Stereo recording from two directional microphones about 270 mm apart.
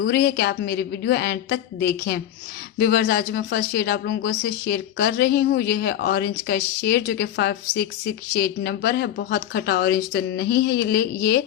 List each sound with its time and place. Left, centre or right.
0.0 s speech: left